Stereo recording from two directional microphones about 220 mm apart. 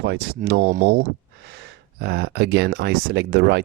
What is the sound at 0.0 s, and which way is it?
Speech, 45° right (ahead or behind).